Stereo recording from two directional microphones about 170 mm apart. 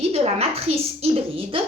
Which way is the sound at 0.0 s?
35° right (ahead or behind).